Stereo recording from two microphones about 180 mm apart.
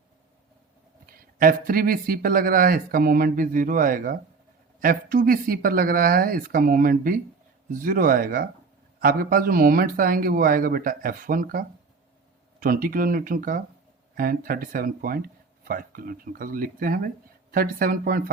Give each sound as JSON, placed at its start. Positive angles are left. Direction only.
{"t": 1.0, "sound": "speech", "side_deg": -55}